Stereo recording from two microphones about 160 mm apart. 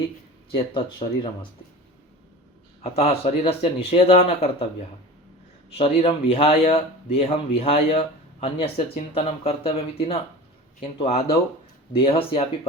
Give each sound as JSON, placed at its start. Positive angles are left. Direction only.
{"t": 0.5, "sound": "speech", "side_deg": 30}
{"t": 2.8, "sound": "speech", "side_deg": 40}
{"t": 5.7, "sound": "speech", "side_deg": 40}